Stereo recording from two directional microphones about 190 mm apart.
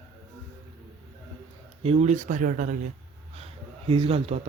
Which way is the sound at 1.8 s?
35° right (ahead or behind).